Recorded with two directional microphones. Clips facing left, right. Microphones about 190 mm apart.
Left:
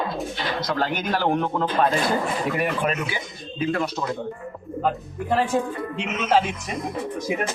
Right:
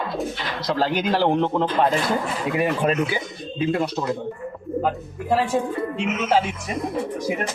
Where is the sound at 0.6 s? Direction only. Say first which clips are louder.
Right 4 dB; 30° right (ahead or behind).